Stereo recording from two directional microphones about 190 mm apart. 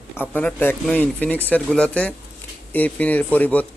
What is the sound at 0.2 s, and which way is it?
A man's voice, 10° left (ahead or behind).